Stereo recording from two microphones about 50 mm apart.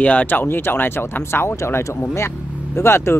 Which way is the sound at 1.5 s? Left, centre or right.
Left.